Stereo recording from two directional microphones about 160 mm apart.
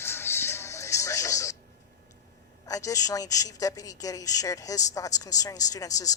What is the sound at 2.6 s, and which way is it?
Speech, 20° left (ahead or behind).